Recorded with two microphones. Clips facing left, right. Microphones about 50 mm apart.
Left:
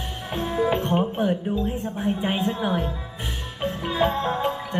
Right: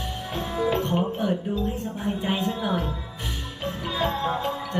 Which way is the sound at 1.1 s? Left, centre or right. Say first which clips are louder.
Left 2 dB; left.